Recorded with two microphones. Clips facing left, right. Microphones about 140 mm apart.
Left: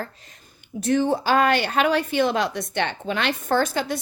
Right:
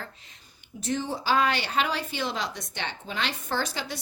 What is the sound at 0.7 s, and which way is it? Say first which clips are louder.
A woman's voice: left 9 dB; 60° left (ahead or behind).